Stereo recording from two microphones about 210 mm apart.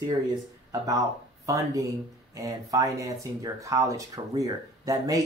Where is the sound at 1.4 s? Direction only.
15° right (ahead or behind).